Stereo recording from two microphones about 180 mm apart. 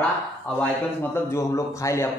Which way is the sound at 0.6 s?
10° left (ahead or behind).